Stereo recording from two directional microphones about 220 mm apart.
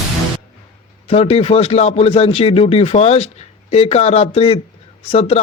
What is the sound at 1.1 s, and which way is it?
Speech, 25° left (ahead or behind).